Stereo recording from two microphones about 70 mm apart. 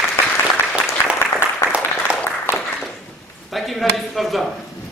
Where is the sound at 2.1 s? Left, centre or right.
Centre.